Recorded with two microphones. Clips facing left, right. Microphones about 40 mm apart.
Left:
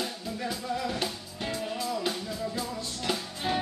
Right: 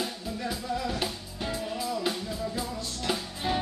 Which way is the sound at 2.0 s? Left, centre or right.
Centre.